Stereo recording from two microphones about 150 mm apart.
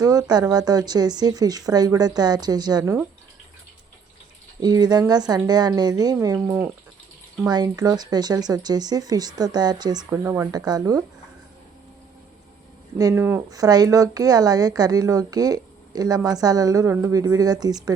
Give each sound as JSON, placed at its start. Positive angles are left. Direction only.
{"t": 0.0, "sound": "a woman's voice", "side_deg": -25}
{"t": 4.6, "sound": "a woman's voice", "side_deg": -25}
{"t": 7.4, "sound": "a woman's voice", "side_deg": -25}
{"t": 10.2, "sound": "a woman's voice", "side_deg": -15}
{"t": 13.0, "sound": "a woman's voice", "side_deg": -20}